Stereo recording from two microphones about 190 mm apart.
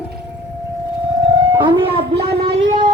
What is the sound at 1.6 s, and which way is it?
Speech, 25° right (ahead or behind).